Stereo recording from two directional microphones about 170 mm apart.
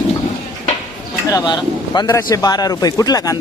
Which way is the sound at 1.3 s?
25° left (ahead or behind).